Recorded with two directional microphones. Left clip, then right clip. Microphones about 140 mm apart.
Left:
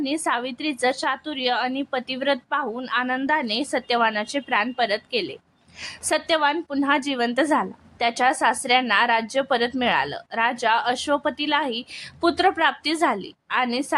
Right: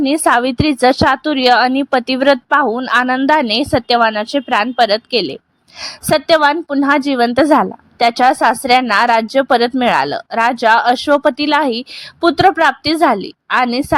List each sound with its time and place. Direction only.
0.0 s a woman's voice: 55° right (ahead or behind)